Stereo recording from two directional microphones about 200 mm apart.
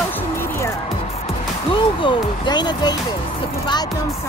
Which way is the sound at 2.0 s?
20° left (ahead or behind).